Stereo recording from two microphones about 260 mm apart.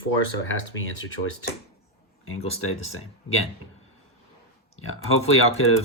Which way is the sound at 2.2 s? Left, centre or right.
Left.